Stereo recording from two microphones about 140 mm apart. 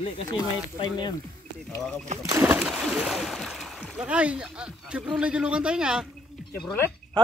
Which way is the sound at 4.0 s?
10° right (ahead or behind).